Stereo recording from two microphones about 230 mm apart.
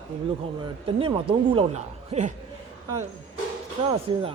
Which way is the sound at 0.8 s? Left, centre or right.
Right.